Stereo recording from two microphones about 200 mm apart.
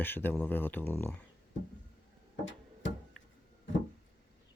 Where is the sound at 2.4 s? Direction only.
70° left (ahead or behind).